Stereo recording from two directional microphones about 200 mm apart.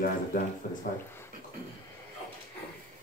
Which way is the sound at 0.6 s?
40° left (ahead or behind).